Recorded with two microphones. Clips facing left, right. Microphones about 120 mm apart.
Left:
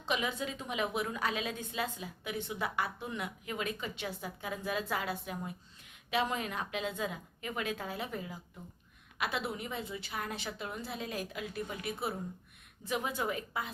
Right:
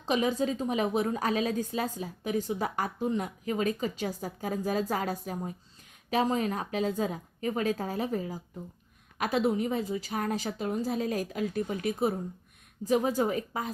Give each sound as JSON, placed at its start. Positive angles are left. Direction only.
{"t": 0.0, "sound": "a woman's voice", "side_deg": -40}